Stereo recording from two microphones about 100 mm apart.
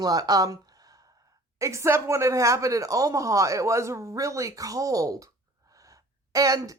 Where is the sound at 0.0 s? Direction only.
40° right (ahead or behind).